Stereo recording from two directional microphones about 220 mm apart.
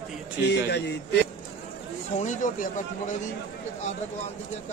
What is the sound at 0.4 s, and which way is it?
Speech, 50° left (ahead or behind).